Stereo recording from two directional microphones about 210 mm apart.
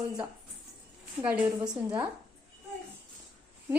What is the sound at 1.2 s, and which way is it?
Speech, 5° right (ahead or behind).